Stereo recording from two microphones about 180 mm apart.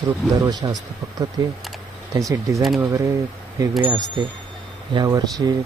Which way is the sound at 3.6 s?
20° right (ahead or behind).